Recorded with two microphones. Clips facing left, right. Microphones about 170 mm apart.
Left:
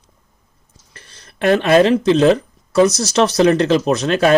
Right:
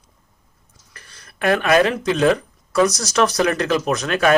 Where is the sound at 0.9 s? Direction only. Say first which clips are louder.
Left 4 dB; 25° left (ahead or behind).